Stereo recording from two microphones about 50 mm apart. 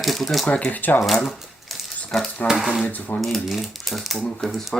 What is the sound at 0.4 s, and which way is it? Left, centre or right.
Speech, centre.